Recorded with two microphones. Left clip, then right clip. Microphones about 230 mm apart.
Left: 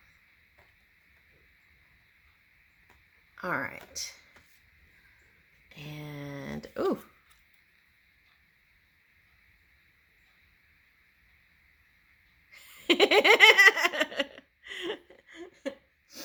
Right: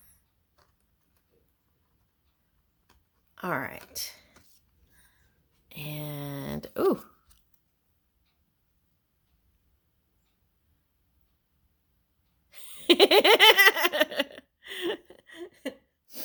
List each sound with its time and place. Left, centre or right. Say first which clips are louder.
3.3 s speech: right 1 dB; right
5.6 s a sound: right 5 dB; right
12.5 s laughter: right 4 dB; right